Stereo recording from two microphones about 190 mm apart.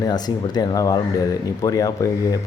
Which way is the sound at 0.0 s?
20° left (ahead or behind).